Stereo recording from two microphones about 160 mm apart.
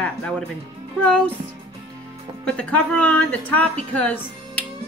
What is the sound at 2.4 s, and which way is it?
Speech, 5° left (ahead or behind).